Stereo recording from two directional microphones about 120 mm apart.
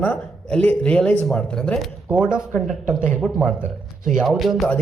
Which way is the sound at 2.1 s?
5° right (ahead or behind).